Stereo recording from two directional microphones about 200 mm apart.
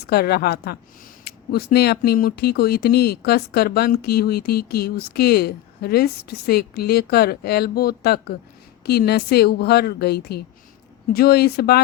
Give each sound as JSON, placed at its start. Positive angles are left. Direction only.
{"t": 0.0, "sound": "speech", "side_deg": 55}